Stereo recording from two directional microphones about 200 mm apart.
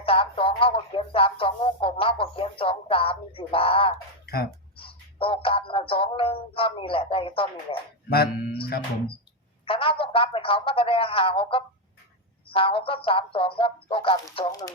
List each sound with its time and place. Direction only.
0.0 s speech: 25° left (ahead or behind)
4.8 s music: 25° left (ahead or behind)
8.1 s speech: 50° left (ahead or behind)
9.6 s speech: 25° left (ahead or behind)